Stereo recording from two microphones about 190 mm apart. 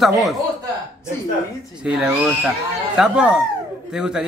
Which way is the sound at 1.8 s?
5° right (ahead or behind).